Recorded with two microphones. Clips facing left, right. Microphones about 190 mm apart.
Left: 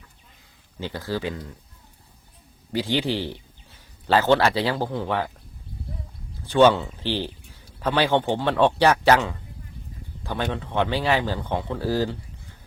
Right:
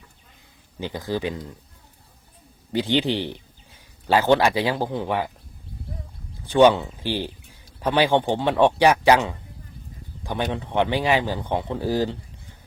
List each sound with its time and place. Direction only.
0.8 s speech: 15° right (ahead or behind)
2.7 s speech: 20° right (ahead or behind)
6.4 s speech: 15° right (ahead or behind)